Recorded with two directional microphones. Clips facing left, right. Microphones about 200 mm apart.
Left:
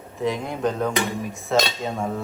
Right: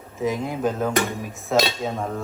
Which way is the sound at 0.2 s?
Centre (ahead or behind).